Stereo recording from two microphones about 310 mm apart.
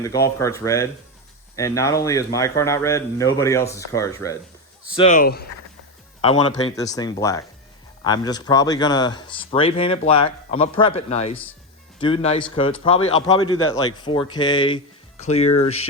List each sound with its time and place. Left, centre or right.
0.0 s speech: centre
4.9 s speech: left
6.2 s speech: centre